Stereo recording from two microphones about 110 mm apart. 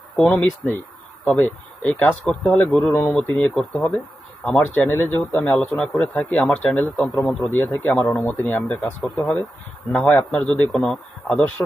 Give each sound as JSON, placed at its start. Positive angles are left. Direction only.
{"t": 0.3, "sound": "a man's voice", "side_deg": 10}
{"t": 9.0, "sound": "a man's voice", "side_deg": 0}